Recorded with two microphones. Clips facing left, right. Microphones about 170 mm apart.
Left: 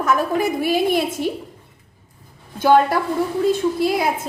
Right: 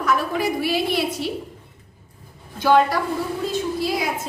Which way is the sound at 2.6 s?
50° left (ahead or behind).